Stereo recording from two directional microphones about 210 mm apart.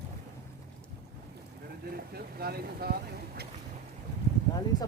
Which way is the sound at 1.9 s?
50° right (ahead or behind).